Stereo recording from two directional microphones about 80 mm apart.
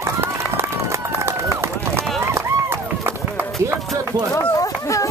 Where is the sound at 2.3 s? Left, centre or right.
Right.